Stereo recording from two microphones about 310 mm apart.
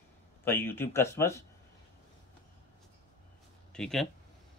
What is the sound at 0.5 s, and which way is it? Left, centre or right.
Speech, centre.